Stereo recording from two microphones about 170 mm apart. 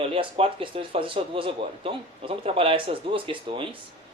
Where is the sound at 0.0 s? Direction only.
35° right (ahead or behind).